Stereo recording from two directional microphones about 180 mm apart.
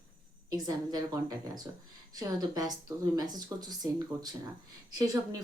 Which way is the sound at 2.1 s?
20° right (ahead or behind).